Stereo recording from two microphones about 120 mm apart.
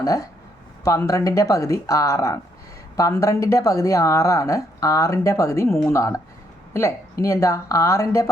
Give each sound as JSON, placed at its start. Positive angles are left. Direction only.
{"t": 0.0, "sound": "speech", "side_deg": 30}